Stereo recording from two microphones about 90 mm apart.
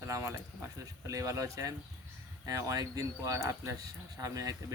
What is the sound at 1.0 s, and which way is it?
Speech, 40° right (ahead or behind).